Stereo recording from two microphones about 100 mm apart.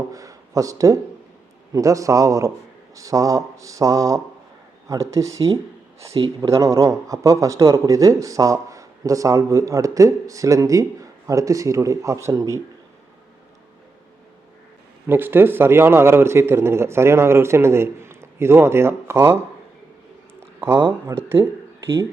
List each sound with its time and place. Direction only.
0.1 s a sound: 35° right (ahead or behind)
1.7 s speech: 35° right (ahead or behind)
6.1 s speech: 65° right (ahead or behind)
6.5 s speech: 30° right (ahead or behind)
15.0 s a man's voice: 20° right (ahead or behind)
20.6 s a man's voice: 25° right (ahead or behind)